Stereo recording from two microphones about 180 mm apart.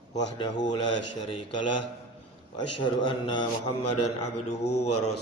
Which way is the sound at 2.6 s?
25° left (ahead or behind).